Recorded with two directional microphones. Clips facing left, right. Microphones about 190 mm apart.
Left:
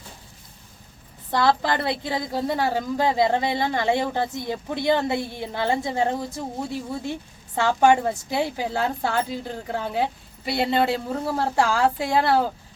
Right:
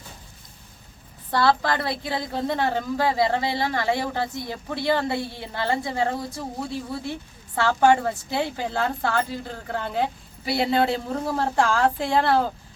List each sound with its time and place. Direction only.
1.3 s a woman's voice: 20° left (ahead or behind)
2.1 s speech: 10° left (ahead or behind)
10.4 s a woman's voice: centre (ahead or behind)